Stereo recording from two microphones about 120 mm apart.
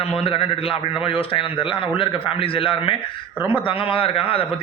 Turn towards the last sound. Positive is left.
turn(degrees=50)  # may be behind; listen again after turning